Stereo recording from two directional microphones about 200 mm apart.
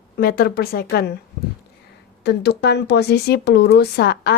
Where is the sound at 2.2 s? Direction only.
55° left (ahead or behind).